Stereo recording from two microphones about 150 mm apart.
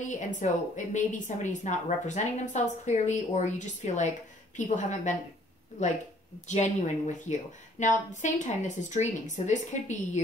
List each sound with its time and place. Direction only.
0.1 s a woman's voice: 55° left (ahead or behind)